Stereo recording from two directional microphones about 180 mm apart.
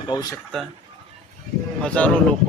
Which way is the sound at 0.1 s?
20° left (ahead or behind).